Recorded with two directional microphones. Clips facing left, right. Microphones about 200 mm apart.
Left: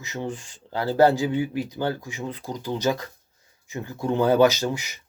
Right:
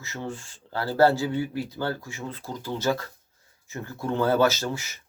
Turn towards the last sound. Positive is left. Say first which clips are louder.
# left 3 dB
turn(degrees=15)  # may be behind; listen again after turning